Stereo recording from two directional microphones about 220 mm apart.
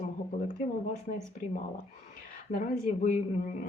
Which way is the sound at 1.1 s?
35° left (ahead or behind).